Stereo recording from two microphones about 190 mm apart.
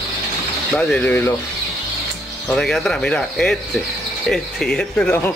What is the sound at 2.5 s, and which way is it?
Speech, centre (ahead or behind).